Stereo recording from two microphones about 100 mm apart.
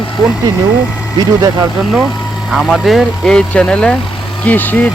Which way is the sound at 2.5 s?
Centre (ahead or behind).